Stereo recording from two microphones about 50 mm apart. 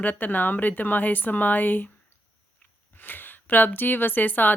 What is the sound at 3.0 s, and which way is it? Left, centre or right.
Speech, left.